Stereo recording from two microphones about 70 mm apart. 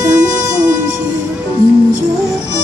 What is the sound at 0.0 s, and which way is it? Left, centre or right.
Music, right.